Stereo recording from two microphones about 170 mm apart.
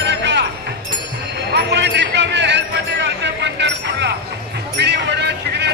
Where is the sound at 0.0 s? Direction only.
90° right.